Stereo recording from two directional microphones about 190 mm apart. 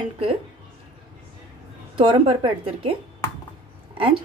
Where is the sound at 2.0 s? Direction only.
25° right (ahead or behind).